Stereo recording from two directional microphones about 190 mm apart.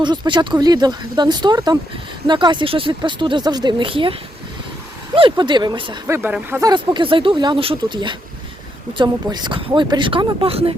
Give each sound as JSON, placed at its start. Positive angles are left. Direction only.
{"t": 0.0, "sound": "speech", "side_deg": -25}
{"t": 5.1, "sound": "speech", "side_deg": -25}
{"t": 6.1, "sound": "speech", "side_deg": -10}